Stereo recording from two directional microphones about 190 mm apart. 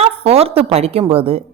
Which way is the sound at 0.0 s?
30° right (ahead or behind).